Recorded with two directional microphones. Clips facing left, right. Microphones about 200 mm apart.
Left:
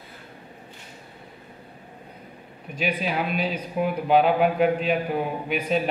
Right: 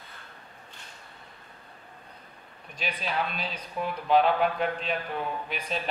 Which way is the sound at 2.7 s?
5° left (ahead or behind).